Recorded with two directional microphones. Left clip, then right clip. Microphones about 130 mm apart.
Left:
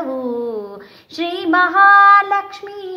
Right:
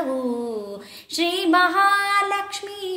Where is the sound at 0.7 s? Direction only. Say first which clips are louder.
Right 2 dB; 45° right (ahead or behind).